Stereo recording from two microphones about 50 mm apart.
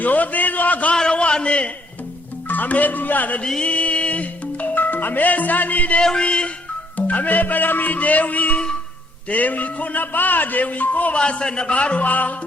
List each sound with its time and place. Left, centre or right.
0.0 s a man's voice: left
0.9 s a sound: left
2.5 s a man's voice: left
3.6 s music: left
6.0 s a man's voice: centre
6.9 s a man's voice: left
11.2 s a man's voice: left